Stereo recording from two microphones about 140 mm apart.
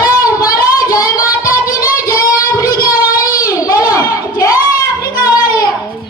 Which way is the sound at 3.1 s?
25° left (ahead or behind).